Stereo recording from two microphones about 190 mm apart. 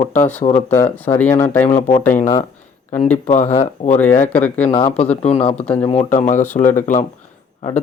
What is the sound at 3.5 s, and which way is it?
Speech, 35° left (ahead or behind).